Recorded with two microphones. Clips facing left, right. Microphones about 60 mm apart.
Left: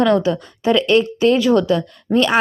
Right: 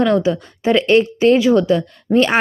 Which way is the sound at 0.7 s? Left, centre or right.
Right.